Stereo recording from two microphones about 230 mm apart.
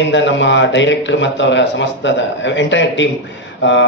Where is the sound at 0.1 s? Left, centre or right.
Left.